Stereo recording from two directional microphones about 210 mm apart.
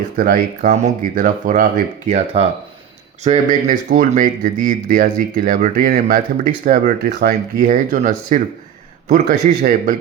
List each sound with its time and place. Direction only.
0.2 s speech: 40° right (ahead or behind)